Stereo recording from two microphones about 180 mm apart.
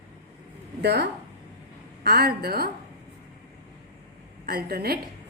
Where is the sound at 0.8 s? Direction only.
65° right (ahead or behind).